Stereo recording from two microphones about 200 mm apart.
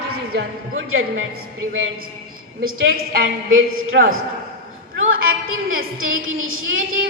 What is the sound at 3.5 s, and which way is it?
Speech, 80° right.